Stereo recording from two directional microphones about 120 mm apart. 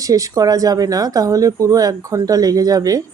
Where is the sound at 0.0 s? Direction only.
30° right (ahead or behind).